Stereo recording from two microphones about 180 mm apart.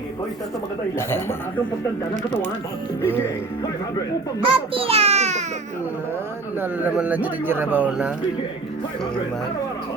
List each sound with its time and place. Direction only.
0.9 s speech: 15° left (ahead or behind)
4.4 s a sound: 30° right (ahead or behind)
6.6 s a man's voice: 10° right (ahead or behind)